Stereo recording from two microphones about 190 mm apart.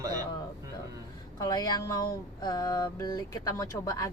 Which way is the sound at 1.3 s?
20° left (ahead or behind).